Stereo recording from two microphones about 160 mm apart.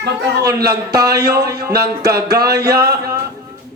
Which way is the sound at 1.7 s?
80° right.